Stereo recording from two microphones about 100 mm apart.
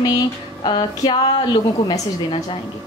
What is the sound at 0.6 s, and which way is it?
Speech, 55° left (ahead or behind).